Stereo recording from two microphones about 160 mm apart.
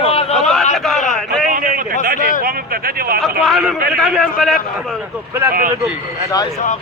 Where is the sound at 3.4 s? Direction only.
Centre (ahead or behind).